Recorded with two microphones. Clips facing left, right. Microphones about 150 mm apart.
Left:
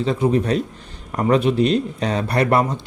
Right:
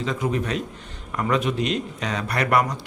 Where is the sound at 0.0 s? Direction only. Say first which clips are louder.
Left 6 dB; 35° left (ahead or behind).